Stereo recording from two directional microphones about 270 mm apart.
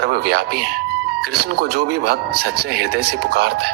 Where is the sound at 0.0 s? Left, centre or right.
Right.